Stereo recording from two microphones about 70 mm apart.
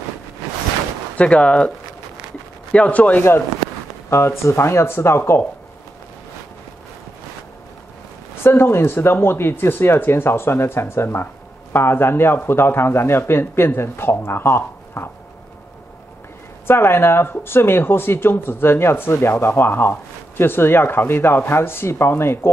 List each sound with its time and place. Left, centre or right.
1.1 s speech: centre
2.7 s speech: centre
3.2 s speech: left
8.5 s speech: left
16.6 s speech: left